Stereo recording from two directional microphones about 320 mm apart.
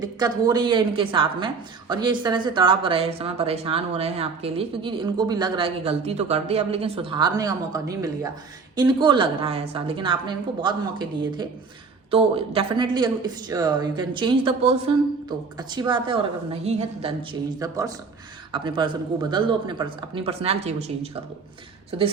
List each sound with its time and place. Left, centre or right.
0.0 s speech: centre